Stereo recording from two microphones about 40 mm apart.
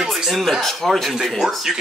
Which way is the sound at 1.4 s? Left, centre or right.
Centre.